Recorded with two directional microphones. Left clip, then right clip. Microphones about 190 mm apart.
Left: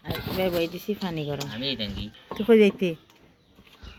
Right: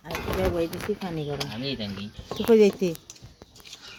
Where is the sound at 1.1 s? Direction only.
10° left (ahead or behind).